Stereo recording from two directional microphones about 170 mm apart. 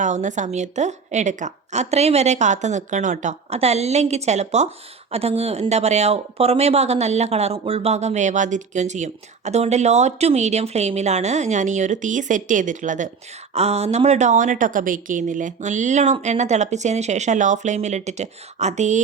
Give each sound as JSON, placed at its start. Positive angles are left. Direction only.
{"t": 0.0, "sound": "a woman's voice", "side_deg": -45}
{"t": 13.5, "sound": "a woman's voice", "side_deg": -40}